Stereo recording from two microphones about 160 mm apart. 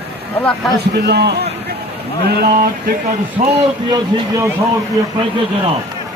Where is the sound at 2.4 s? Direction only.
70° right (ahead or behind).